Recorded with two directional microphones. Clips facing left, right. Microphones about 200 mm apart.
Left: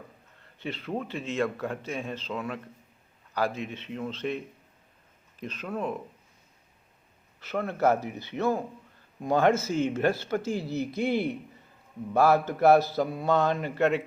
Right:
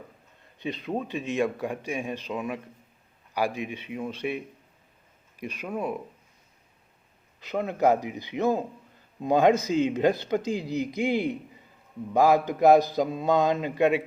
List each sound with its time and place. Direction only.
0.6 s speech: 15° right (ahead or behind)
7.3 s speech: 15° right (ahead or behind)